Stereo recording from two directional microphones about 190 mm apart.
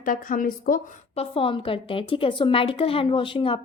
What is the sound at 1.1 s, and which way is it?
Speech, 30° left (ahead or behind).